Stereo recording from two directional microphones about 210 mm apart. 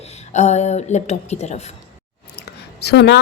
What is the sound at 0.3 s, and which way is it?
A woman's voice, 35° left (ahead or behind).